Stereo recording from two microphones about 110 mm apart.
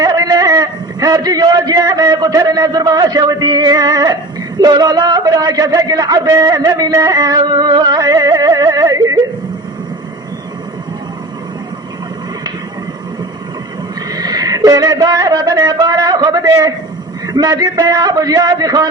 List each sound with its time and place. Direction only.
0.0 s a man's voice: 35° right (ahead or behind)
14.1 s a man's voice: 35° right (ahead or behind)